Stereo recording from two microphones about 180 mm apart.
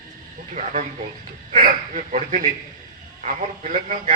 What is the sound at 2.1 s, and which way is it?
A man's voice, 45° right (ahead or behind).